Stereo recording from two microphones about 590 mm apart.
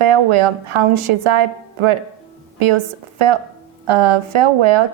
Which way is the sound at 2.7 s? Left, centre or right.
Right.